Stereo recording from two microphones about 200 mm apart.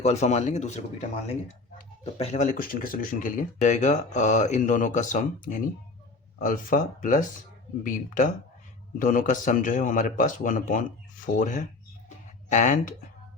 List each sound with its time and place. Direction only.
0.0 s speech: 35° left (ahead or behind)
2.1 s speech: 35° left (ahead or behind)
12.0 s a sound: 40° left (ahead or behind)